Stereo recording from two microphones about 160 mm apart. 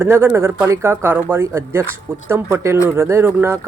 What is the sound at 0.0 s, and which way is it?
Speech, 15° right (ahead or behind).